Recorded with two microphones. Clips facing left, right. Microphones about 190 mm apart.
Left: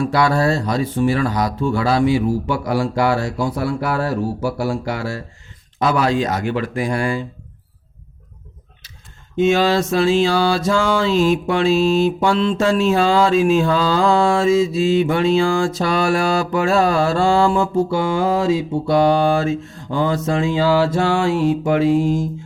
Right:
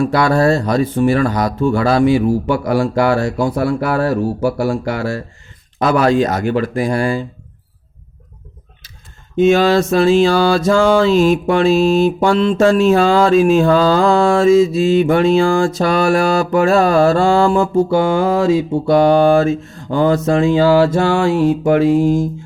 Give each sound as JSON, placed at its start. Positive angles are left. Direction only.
{"t": 0.0, "sound": "mantra", "side_deg": -50}
{"t": 9.3, "sound": "mantra", "side_deg": -50}